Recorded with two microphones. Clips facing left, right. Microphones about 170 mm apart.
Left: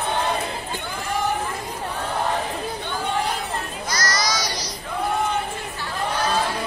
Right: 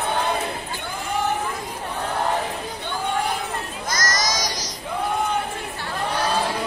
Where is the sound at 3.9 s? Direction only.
45° right (ahead or behind).